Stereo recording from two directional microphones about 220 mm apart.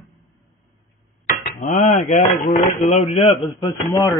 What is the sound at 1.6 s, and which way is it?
Speech, 30° left (ahead or behind).